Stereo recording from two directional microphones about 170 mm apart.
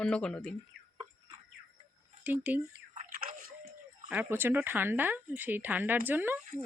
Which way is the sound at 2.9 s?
55° right (ahead or behind).